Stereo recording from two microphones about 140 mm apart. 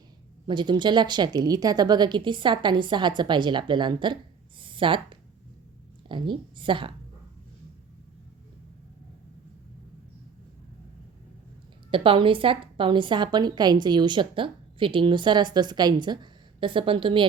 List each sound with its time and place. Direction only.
0.4 s a woman's voice: 35° right (ahead or behind)
11.9 s a woman's voice: 40° right (ahead or behind)